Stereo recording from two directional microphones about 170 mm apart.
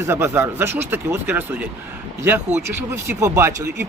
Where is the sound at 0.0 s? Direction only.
15° right (ahead or behind).